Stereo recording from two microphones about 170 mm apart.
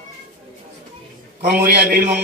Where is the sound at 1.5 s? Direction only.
70° right (ahead or behind).